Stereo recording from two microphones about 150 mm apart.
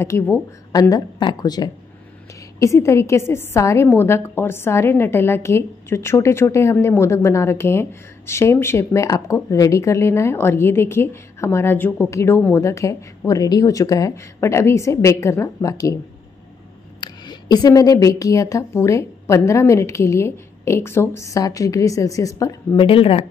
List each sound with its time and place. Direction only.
0.0 s a woman's voice: 20° left (ahead or behind)
17.0 s a woman's voice: 30° left (ahead or behind)
22.8 s speech: 40° left (ahead or behind)